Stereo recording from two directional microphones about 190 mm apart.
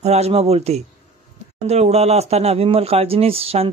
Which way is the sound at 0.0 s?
35° right (ahead or behind).